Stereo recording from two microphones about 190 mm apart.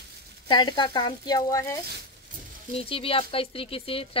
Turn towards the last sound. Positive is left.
turn(degrees=30)  # may be behind; listen again after turning